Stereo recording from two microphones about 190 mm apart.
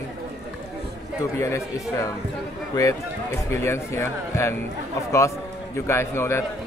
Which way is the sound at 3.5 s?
15° left (ahead or behind).